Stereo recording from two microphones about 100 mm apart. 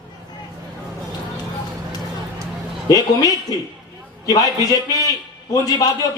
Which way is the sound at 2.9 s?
35° left (ahead or behind).